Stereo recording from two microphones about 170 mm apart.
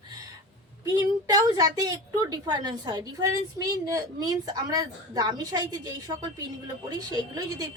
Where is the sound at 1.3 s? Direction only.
20° right (ahead or behind).